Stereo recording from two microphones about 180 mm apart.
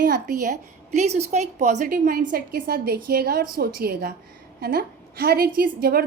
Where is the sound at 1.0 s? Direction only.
40° right (ahead or behind); by 6.0 s 55° right (ahead or behind).